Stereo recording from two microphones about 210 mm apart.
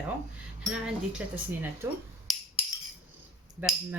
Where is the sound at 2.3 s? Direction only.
Centre (ahead or behind).